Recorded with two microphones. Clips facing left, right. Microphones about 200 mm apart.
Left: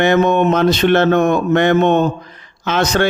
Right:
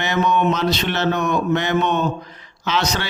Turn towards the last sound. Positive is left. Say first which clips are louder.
# left 6 dB
turn(degrees=50)  # may be behind; listen again after turning